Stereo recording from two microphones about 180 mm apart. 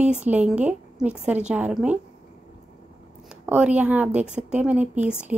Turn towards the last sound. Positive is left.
turn(degrees=-5)  # may be behind; listen again after turning